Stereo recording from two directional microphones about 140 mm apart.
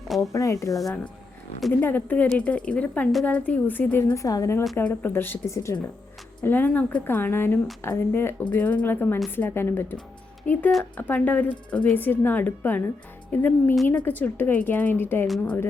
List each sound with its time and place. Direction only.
0.2 s speech: 25° left (ahead or behind)
0.7 s speech: centre (ahead or behind)
1.8 s a woman's voice: 15° left (ahead or behind)